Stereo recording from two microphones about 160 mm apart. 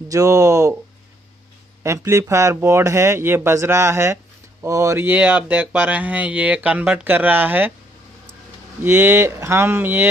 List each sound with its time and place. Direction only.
0.1 s speech: 20° right (ahead or behind)
1.8 s speech: 15° right (ahead or behind)
8.8 s speech: 15° right (ahead or behind)